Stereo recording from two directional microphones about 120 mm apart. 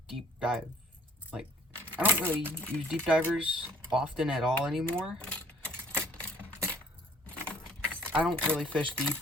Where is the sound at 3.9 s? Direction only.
5° right (ahead or behind).